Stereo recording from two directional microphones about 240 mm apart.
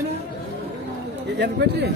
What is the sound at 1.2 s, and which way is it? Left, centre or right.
Speech, right.